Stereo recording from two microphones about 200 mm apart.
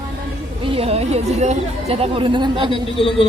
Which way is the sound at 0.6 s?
30° right (ahead or behind).